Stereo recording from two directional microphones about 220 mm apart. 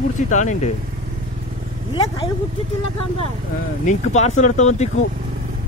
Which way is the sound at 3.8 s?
30° left (ahead or behind).